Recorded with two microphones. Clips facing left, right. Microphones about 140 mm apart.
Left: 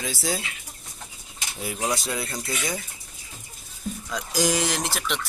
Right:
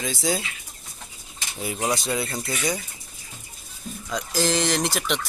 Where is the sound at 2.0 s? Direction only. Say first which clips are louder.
Right 3 dB; centre (ahead or behind).